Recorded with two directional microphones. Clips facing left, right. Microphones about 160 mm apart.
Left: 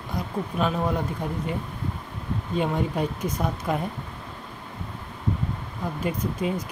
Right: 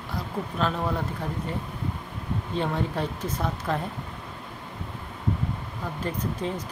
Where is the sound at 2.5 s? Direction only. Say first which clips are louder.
Left 3 dB; 15° left (ahead or behind).